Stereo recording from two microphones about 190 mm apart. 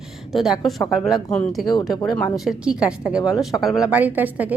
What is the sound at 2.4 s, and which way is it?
A woman's voice, 5° right (ahead or behind).